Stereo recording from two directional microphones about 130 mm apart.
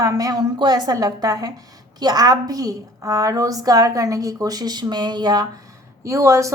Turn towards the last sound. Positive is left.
turn(degrees=-25)  # may be behind; listen again after turning